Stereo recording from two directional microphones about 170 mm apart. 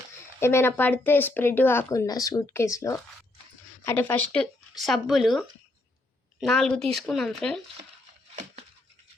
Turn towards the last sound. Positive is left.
turn(degrees=5)  # may be behind; listen again after turning